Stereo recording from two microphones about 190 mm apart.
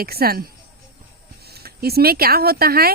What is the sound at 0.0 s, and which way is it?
Speech, 55° right (ahead or behind).